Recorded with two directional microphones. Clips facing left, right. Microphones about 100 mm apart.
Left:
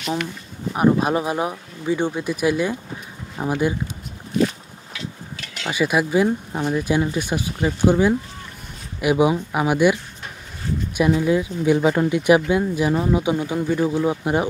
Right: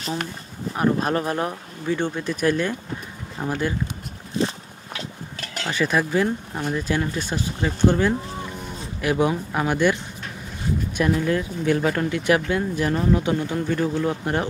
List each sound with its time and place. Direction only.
0.7 s speech: 15° left (ahead or behind)
4.4 s boat: 30° right (ahead or behind)
4.9 s a sound: 40° right (ahead or behind)
5.7 s speech: 10° left (ahead or behind)
11.0 s speech: 10° left (ahead or behind)